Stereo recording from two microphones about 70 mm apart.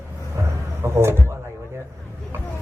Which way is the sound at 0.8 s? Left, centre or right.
Right.